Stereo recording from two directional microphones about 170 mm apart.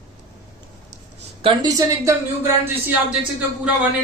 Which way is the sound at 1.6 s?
20° right (ahead or behind).